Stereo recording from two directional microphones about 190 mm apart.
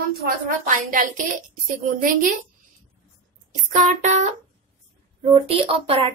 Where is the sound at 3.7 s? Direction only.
45° right (ahead or behind).